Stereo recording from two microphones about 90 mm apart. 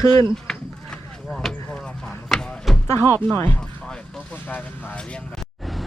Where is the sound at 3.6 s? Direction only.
10° left (ahead or behind).